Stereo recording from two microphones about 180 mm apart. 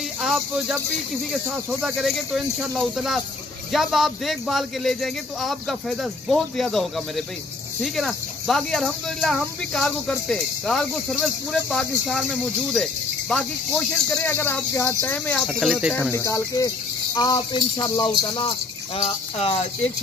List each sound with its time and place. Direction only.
0.2 s speech: centre (ahead or behind)
15.9 s speech: 10° left (ahead or behind); by 19.7 s 35° left (ahead or behind)